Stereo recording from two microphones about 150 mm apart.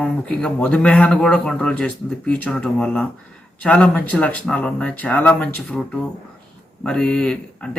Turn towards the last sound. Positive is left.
turn(degrees=5)  # may be behind; listen again after turning